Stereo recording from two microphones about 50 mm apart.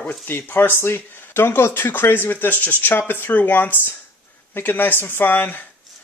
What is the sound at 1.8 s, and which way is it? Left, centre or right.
Speech, left.